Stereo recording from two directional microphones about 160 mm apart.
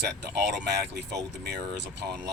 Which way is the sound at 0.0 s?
90° right.